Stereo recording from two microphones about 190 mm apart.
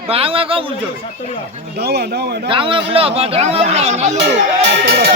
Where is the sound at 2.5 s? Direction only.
25° right (ahead or behind).